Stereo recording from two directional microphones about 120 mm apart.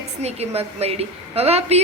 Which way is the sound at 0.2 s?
60° right (ahead or behind).